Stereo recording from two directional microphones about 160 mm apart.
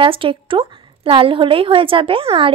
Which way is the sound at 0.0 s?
35° right (ahead or behind).